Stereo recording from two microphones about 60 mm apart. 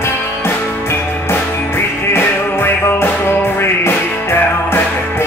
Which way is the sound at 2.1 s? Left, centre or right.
Left.